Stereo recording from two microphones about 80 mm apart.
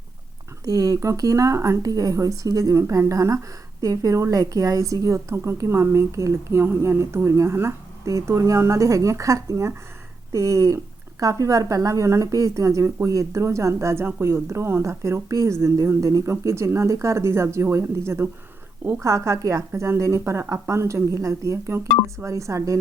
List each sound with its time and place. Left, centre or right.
0.6 s a woman's voice: right
1.8 s a woman's voice: right
2.7 s a woman's voice: right